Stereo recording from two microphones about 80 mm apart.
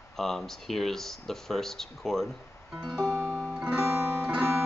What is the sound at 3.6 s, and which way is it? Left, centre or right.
Music, centre.